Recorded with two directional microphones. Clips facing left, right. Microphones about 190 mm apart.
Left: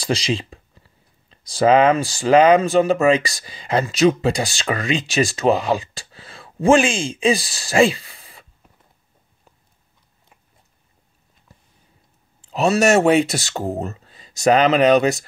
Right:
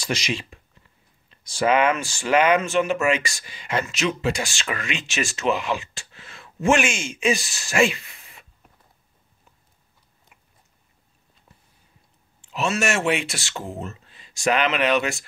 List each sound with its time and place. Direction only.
0.0 s speech: 30° left (ahead or behind)
12.4 s speech: 35° left (ahead or behind)